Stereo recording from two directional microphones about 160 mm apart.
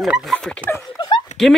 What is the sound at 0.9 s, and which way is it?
Dog, 25° left (ahead or behind).